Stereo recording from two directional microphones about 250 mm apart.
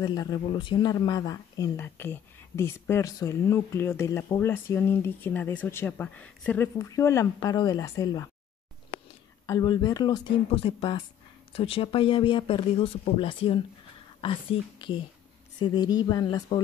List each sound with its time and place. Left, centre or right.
0.0 s speech: centre
9.5 s speech: centre